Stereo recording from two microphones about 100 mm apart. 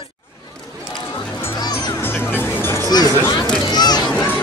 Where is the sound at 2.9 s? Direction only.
45° left (ahead or behind).